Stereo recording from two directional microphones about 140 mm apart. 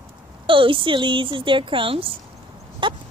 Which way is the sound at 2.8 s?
35° right (ahead or behind).